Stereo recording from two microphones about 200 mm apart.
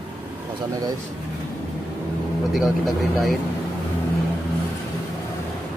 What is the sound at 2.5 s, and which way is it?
Speech, centre (ahead or behind).